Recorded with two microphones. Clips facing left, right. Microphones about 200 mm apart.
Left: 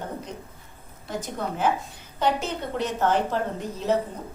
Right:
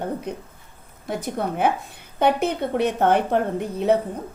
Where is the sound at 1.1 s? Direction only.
60° right (ahead or behind).